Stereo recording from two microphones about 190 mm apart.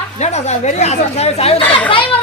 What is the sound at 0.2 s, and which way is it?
Speech, 35° left (ahead or behind).